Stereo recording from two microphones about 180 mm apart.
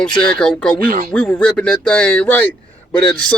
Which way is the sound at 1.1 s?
5° left (ahead or behind).